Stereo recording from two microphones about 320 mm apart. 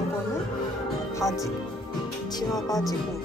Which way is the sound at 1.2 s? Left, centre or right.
Centre.